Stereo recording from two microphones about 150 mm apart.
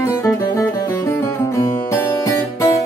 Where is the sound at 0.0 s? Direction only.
20° left (ahead or behind).